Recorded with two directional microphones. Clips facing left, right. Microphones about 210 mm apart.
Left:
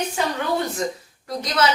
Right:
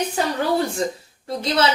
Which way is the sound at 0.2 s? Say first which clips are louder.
Right 1 dB; 40° right (ahead or behind).